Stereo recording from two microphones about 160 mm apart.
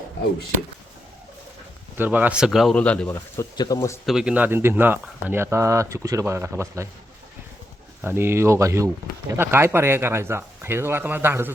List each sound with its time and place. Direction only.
2.0 s speech: 10° right (ahead or behind); by 4.0 s 15° left (ahead or behind)
4.0 s speech: 5° right (ahead or behind)
8.0 s speech: 15° right (ahead or behind)